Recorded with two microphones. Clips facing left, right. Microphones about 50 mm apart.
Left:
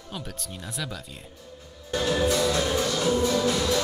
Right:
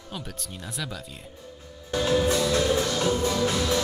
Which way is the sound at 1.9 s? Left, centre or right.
Centre.